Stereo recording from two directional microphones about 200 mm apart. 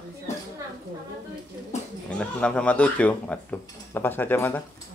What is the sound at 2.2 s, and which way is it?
Speech, 5° left (ahead or behind).